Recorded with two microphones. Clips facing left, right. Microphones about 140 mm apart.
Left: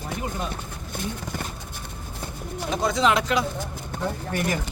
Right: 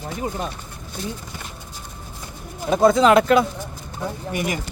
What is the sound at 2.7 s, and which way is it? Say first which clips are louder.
Speech: right 8 dB; 50° right (ahead or behind).